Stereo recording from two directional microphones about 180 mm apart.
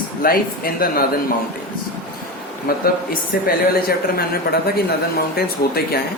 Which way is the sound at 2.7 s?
55° left (ahead or behind).